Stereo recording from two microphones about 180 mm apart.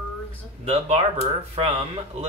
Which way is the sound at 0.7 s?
35° right (ahead or behind).